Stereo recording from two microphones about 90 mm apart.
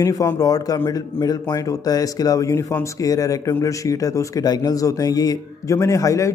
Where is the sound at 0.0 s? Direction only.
40° left (ahead or behind).